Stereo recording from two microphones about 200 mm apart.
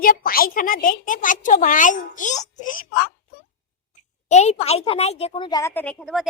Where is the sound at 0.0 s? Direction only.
45° left (ahead or behind).